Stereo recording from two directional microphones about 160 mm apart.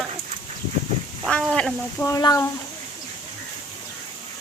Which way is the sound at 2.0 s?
20° left (ahead or behind).